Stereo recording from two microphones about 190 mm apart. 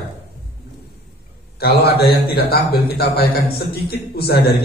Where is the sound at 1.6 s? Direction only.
55° left (ahead or behind).